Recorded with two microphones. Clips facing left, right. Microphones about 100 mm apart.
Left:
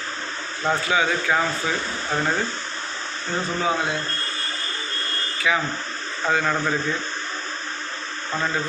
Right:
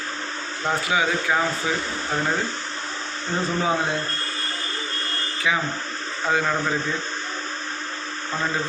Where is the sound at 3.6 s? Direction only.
30° right (ahead or behind).